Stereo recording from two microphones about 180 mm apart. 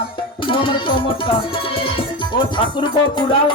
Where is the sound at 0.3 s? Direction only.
30° left (ahead or behind).